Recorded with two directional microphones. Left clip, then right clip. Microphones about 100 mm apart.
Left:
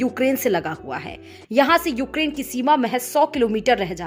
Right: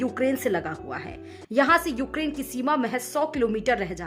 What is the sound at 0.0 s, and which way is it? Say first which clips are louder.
A woman's voice: left 5 dB; 45° left (ahead or behind).